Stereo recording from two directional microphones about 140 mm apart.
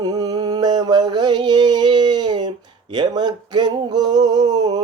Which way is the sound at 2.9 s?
30° right (ahead or behind).